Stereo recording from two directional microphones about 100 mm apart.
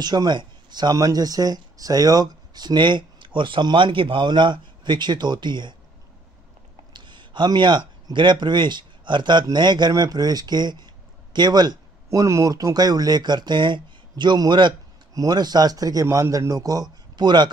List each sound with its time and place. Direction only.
0.0 s speech: 45° right (ahead or behind)
6.9 s a man's voice: 50° right (ahead or behind)